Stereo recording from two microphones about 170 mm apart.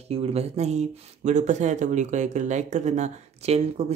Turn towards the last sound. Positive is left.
turn(degrees=-40)  # may be behind; listen again after turning